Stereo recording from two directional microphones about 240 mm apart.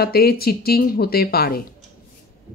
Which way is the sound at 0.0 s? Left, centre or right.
Left.